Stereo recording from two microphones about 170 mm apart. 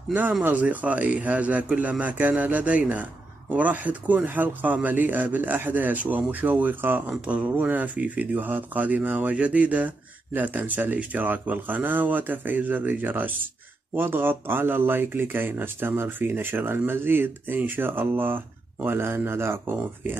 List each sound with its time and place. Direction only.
0.1 s speech: 10° right (ahead or behind)